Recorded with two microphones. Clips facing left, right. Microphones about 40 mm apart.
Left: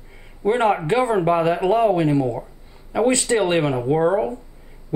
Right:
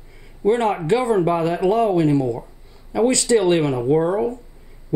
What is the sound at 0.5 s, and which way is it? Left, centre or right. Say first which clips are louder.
Speech: left 2 dB; left.